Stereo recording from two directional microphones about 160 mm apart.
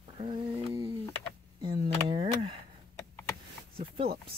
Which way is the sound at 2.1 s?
35° right (ahead or behind).